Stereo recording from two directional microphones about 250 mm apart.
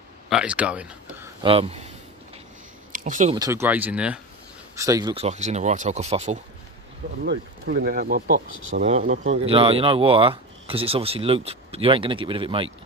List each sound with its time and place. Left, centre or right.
0.3 s speech: centre
1.5 s speech: right
2.9 s speech: right
3.3 s speech: centre
7.3 s speech: right
8.5 s speech: right
8.8 s speech: right
9.4 s speech: right